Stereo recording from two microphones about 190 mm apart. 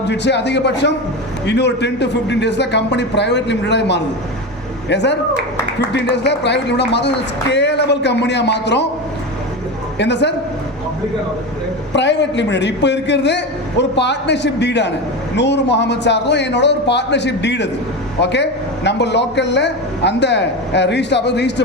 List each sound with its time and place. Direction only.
0.1 s a man's voice: 65° left (ahead or behind)
6.2 s a man's voice: 65° left (ahead or behind)
10.0 s a man's voice: 65° left (ahead or behind)
11.9 s a man's voice: 65° left (ahead or behind)